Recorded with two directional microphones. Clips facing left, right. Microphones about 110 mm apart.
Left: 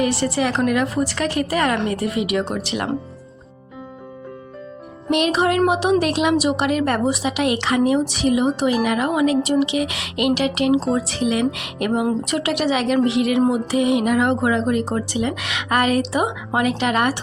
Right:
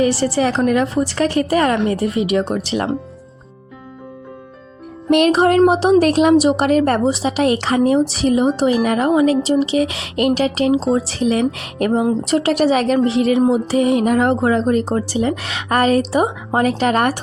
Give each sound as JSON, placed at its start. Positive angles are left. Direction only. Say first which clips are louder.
{"t": 0.0, "sound": "speech", "louder": "right 4 dB", "side_deg": -30}
{"t": 5.1, "sound": "speech", "louder": "right 5 dB", "side_deg": -45}